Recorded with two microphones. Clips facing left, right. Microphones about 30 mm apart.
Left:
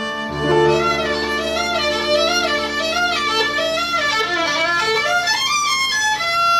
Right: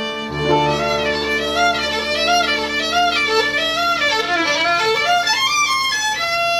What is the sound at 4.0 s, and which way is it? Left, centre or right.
Music, centre.